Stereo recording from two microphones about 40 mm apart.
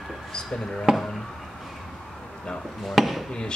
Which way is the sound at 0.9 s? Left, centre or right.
Centre.